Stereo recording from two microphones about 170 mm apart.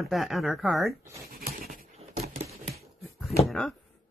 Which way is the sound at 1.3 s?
60° right (ahead or behind).